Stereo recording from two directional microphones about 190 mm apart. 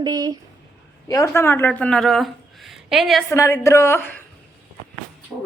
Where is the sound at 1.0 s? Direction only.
15° left (ahead or behind); by 3.2 s centre (ahead or behind).